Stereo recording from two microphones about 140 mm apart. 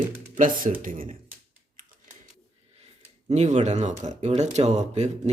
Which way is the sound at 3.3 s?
50° right (ahead or behind).